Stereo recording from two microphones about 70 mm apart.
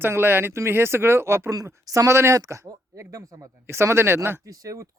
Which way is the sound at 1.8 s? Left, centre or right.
Right.